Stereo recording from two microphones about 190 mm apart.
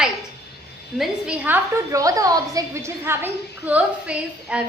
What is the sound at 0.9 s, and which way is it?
A woman's voice, 5° right (ahead or behind).